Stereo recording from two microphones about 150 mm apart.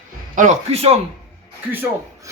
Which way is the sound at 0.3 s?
50° right (ahead or behind).